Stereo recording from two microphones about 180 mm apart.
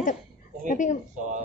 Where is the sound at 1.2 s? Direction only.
45° right (ahead or behind).